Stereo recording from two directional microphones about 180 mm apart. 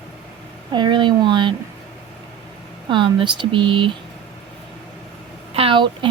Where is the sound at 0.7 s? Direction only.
25° right (ahead or behind).